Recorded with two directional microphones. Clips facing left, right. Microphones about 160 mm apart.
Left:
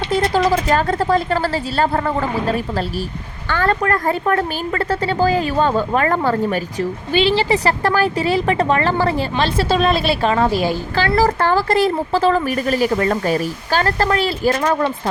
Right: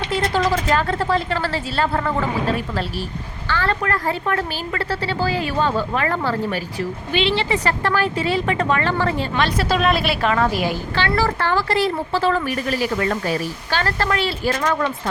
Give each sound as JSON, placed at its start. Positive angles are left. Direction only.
{"t": 0.1, "sound": "a woman's voice", "side_deg": 40}